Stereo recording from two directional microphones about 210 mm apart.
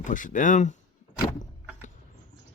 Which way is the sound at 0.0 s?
40° left (ahead or behind).